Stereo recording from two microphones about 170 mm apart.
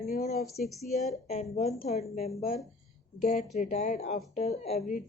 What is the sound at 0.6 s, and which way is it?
Speech, centre (ahead or behind).